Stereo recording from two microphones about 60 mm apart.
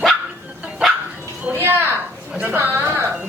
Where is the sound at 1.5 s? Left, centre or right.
Right.